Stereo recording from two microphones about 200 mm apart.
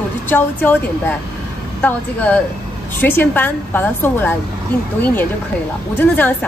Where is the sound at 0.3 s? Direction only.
10° left (ahead or behind).